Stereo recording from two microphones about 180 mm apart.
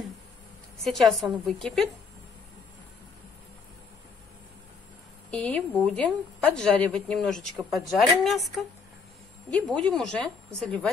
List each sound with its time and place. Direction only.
0.7 s a woman's voice: centre (ahead or behind)
5.3 s a woman's voice: 5° left (ahead or behind)